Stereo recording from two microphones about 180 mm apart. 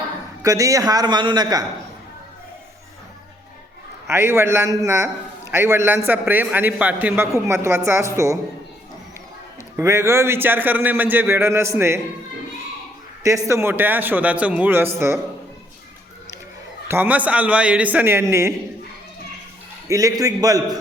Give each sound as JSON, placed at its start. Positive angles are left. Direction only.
{"t": 0.4, "sound": "a man's voice", "side_deg": -20}
{"t": 4.0, "sound": "a man's voice", "side_deg": -15}
{"t": 9.7, "sound": "a man's voice", "side_deg": -15}
{"t": 13.2, "sound": "a man's voice", "side_deg": -15}
{"t": 16.9, "sound": "a man's voice", "side_deg": -10}
{"t": 19.9, "sound": "a man's voice", "side_deg": -20}